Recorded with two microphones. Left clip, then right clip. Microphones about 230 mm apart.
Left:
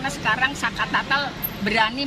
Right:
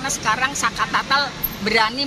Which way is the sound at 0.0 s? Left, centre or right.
Centre.